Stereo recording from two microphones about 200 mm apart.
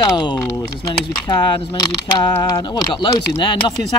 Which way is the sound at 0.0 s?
20° left (ahead or behind).